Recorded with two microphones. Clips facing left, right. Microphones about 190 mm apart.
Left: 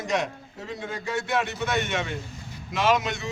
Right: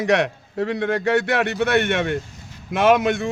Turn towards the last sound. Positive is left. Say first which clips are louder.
# right 7 dB
turn(degrees=-55)  # may be behind; listen again after turning